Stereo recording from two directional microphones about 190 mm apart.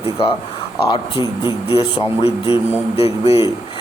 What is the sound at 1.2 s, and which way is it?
Speech, 20° right (ahead or behind).